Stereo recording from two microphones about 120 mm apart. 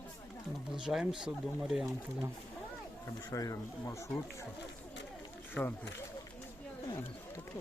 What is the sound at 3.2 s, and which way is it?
Speech, 30° left (ahead or behind).